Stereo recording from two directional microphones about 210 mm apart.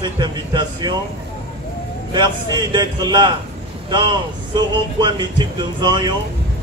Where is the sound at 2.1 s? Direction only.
20° right (ahead or behind).